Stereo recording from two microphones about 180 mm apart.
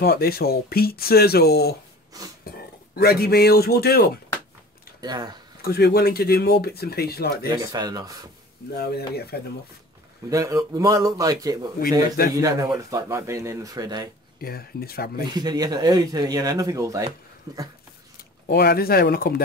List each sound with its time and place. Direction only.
0.0 s speech: 60° left (ahead or behind)
2.1 s speech: 20° right (ahead or behind)
3.0 s speech: 60° left (ahead or behind)
5.0 s speech: 20° right (ahead or behind)
5.6 s speech: 60° left (ahead or behind)
7.7 s speech: 20° right (ahead or behind)
8.7 s speech: 60° left (ahead or behind)
10.3 s speech: 20° right (ahead or behind)
14.4 s speech: 55° left (ahead or behind)
15.3 s speech: 20° right (ahead or behind)
18.5 s speech: 60° left (ahead or behind)